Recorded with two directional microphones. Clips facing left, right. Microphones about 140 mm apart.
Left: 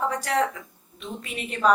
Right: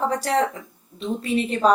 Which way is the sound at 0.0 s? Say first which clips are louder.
Right 3 dB; 30° right (ahead or behind).